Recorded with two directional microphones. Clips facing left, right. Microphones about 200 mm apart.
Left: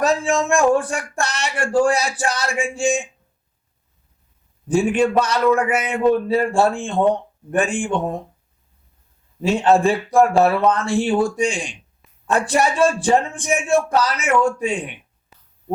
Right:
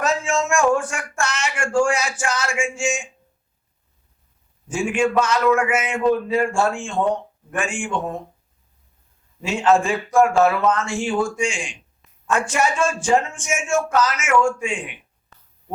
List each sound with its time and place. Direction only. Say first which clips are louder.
0.0 s a man's voice: left 3 dB; 35° left (ahead or behind)
4.7 s a man's voice: left 3 dB; 35° left (ahead or behind)
9.4 s a man's voice: left 3 dB; 35° left (ahead or behind)